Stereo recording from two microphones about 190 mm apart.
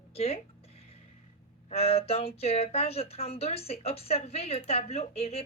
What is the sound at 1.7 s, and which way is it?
Speech, 30° left (ahead or behind).